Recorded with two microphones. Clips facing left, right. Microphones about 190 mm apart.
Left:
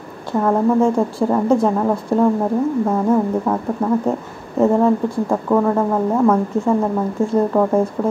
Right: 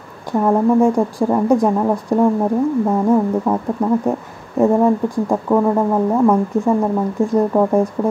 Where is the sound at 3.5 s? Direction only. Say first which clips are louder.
Right 1 dB; 15° right (ahead or behind).